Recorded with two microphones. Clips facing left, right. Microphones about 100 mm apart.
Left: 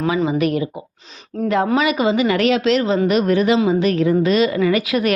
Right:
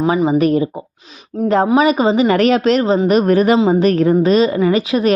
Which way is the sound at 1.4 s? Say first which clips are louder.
Right 3 dB; 15° right (ahead or behind).